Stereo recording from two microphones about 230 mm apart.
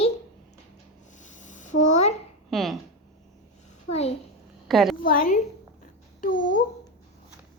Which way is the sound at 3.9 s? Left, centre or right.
Left.